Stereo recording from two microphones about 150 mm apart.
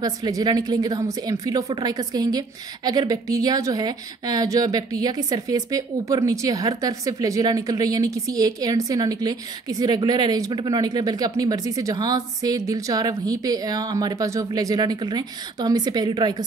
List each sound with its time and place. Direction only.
0.0 s speech: 25° right (ahead or behind)